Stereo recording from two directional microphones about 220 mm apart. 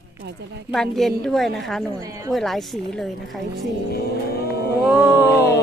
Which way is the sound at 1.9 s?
15° right (ahead or behind).